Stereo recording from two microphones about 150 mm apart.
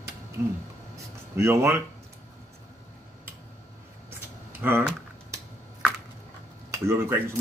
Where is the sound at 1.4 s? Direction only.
20° right (ahead or behind).